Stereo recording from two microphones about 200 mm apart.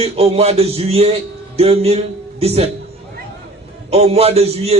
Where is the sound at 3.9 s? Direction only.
30° right (ahead or behind).